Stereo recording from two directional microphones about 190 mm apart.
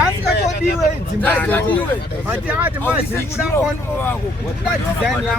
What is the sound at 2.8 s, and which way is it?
Speech, 15° left (ahead or behind).